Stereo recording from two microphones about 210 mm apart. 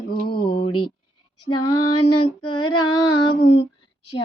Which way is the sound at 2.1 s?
90° left.